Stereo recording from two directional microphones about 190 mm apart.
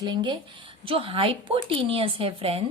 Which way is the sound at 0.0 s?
25° right (ahead or behind).